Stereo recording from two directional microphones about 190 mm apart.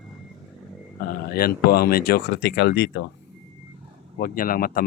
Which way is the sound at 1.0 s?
50° left (ahead or behind).